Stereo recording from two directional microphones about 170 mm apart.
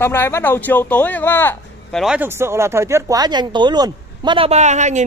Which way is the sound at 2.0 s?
10° right (ahead or behind).